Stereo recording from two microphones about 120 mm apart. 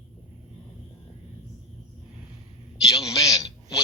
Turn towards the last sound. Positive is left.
turn(degrees=30)  # may be behind; listen again after turning